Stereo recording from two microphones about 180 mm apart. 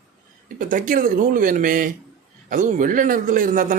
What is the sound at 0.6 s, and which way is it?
Speech, 50° right (ahead or behind).